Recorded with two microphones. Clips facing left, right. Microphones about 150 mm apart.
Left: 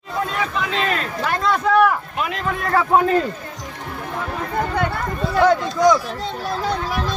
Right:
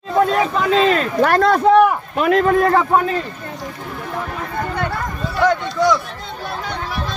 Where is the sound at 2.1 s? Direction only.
50° right (ahead or behind).